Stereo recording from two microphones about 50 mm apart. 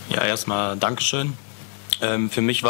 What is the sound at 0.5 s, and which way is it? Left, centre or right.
Speech, centre.